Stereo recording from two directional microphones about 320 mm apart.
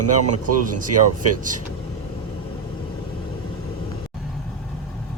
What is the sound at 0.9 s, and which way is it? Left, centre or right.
Speech, right.